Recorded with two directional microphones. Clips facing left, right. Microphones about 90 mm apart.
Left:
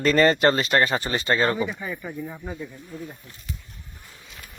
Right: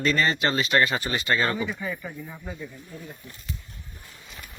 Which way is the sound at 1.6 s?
20° left (ahead or behind).